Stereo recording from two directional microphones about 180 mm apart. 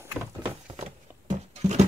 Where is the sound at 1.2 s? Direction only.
40° right (ahead or behind).